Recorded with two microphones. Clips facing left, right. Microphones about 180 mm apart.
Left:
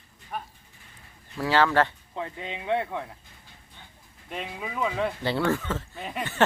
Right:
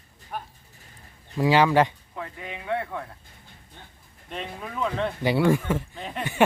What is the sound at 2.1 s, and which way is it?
Speech, 25° left (ahead or behind).